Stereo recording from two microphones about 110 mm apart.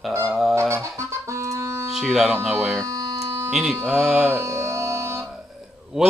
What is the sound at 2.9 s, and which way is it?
Hum, 35° right (ahead or behind).